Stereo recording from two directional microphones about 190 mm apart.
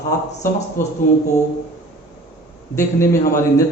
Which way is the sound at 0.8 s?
15° left (ahead or behind).